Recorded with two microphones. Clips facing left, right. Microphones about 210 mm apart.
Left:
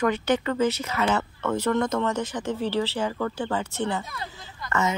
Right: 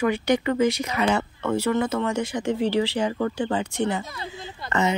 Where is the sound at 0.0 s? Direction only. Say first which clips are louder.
Right 2 dB; 10° right (ahead or behind).